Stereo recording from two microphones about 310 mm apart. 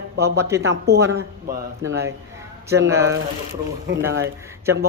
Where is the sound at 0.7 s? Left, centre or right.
Right.